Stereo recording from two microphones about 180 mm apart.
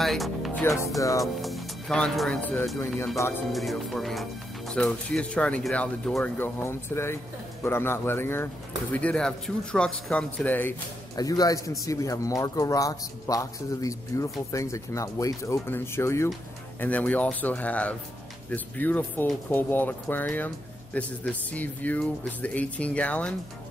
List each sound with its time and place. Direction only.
0.0 s music: centre (ahead or behind)
0.7 s speech: 15° left (ahead or behind)
1.2 s speech: centre (ahead or behind)
11.1 s speech: 20° left (ahead or behind)